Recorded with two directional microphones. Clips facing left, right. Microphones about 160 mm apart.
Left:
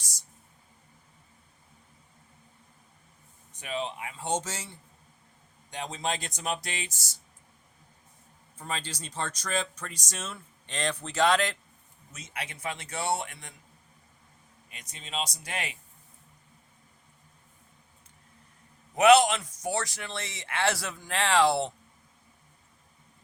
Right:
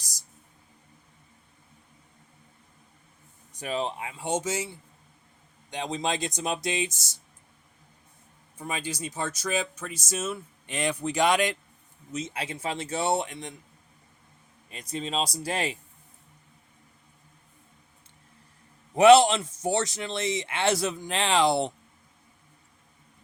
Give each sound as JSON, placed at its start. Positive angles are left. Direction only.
{"t": 0.0, "sound": "a sound", "side_deg": -35}
{"t": 3.6, "sound": "speech", "side_deg": -35}
{"t": 4.2, "sound": "speech", "side_deg": -10}
{"t": 8.5, "sound": "speech", "side_deg": -10}
{"t": 12.1, "sound": "speech", "side_deg": -25}
{"t": 14.7, "sound": "speech", "side_deg": -35}
{"t": 18.9, "sound": "speech", "side_deg": -30}